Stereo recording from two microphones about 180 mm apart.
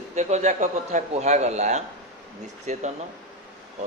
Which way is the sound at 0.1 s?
40° right (ahead or behind).